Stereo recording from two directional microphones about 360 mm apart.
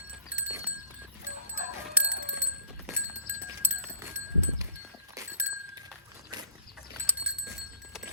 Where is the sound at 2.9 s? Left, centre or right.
Centre.